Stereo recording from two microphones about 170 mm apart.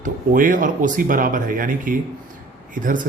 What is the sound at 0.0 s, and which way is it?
Speech, 50° right (ahead or behind).